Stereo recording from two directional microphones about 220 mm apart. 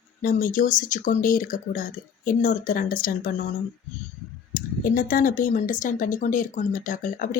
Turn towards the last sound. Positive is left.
turn(degrees=35)  # may be behind; listen again after turning